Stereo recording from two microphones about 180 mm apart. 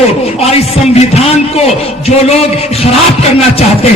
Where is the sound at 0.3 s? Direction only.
35° left (ahead or behind).